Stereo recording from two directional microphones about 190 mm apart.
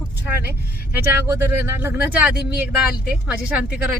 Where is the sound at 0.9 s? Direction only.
10° right (ahead or behind).